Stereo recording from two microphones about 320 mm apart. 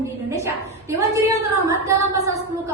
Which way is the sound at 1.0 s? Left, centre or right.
Centre.